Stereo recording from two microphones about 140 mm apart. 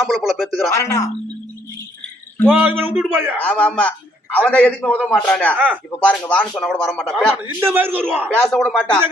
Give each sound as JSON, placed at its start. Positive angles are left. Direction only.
{"t": 0.0, "sound": "speech", "side_deg": 0}
{"t": 0.7, "sound": "speech", "side_deg": 20}
{"t": 2.5, "sound": "a man's voice", "side_deg": -10}
{"t": 3.4, "sound": "speech", "side_deg": 10}
{"t": 5.5, "sound": "a man's voice", "side_deg": -10}
{"t": 6.0, "sound": "speech", "side_deg": 10}
{"t": 7.3, "sound": "a man's voice", "side_deg": -15}
{"t": 8.5, "sound": "speech", "side_deg": 5}